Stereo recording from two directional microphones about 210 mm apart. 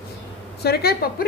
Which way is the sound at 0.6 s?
50° left (ahead or behind).